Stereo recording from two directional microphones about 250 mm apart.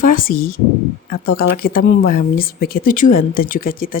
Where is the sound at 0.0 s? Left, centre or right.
Left.